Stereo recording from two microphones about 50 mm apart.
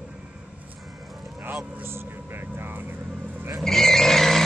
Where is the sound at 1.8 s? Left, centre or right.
Right.